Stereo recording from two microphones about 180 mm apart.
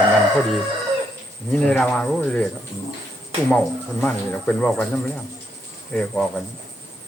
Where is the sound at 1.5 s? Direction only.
5° left (ahead or behind).